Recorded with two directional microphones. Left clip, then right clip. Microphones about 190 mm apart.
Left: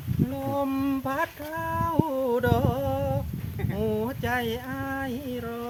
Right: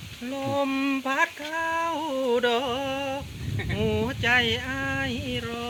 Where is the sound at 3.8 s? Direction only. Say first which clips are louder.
Right 2 dB; 10° left (ahead or behind).